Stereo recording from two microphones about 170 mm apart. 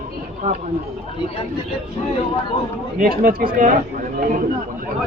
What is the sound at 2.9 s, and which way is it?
Speech, 60° right (ahead or behind).